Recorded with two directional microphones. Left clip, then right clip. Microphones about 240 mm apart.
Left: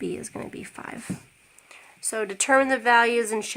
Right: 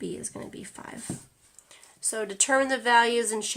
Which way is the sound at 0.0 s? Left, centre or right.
Left.